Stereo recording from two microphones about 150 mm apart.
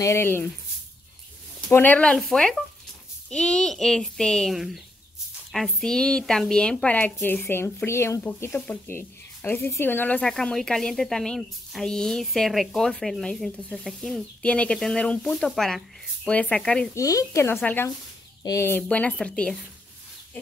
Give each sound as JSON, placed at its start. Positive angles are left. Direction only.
{"t": 0.0, "sound": "speech", "side_deg": 15}
{"t": 1.7, "sound": "speech", "side_deg": 10}
{"t": 16.9, "sound": "speech", "side_deg": 20}